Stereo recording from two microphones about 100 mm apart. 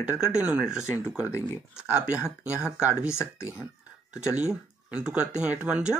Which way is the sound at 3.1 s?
25° left (ahead or behind).